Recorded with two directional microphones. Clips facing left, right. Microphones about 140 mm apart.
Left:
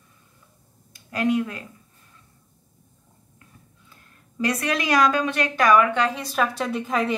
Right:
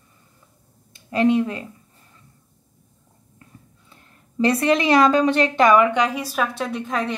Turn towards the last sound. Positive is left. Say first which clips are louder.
# left 1 dB
turn(degrees=0)  # may be behind; listen again after turning